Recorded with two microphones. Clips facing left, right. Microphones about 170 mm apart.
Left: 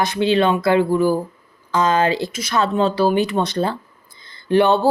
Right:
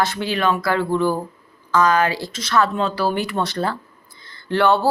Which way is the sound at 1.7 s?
20° left (ahead or behind).